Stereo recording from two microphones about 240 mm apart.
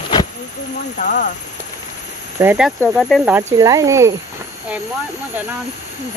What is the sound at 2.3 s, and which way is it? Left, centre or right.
Speech, centre.